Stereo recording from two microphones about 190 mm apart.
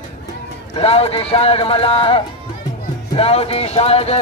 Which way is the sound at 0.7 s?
30° left (ahead or behind).